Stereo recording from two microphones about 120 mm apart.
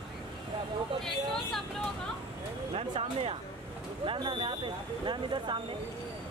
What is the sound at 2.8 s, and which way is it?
Speech, 55° right (ahead or behind).